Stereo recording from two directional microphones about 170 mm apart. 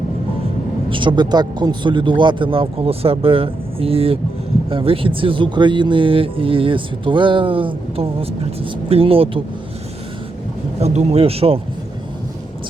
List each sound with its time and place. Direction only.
0.9 s speech: 30° right (ahead or behind)
10.8 s speech: 40° right (ahead or behind)